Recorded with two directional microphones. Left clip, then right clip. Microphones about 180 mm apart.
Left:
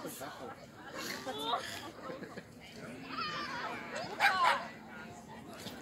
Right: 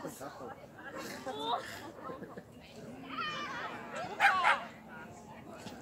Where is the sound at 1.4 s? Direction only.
50° right (ahead or behind).